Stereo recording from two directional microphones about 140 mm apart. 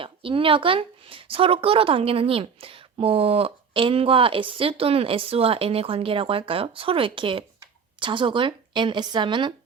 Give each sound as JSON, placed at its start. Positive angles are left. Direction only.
{"t": 0.0, "sound": "speech", "side_deg": -40}